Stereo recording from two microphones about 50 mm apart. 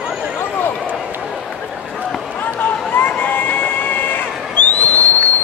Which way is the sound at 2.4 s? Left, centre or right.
Left.